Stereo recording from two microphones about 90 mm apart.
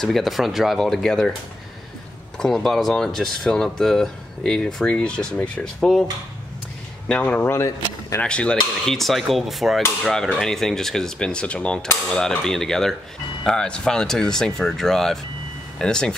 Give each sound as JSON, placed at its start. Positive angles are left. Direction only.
{"t": 0.0, "sound": "speech", "side_deg": 0}
{"t": 2.3, "sound": "speech", "side_deg": 5}
{"t": 7.1, "sound": "speech", "side_deg": 15}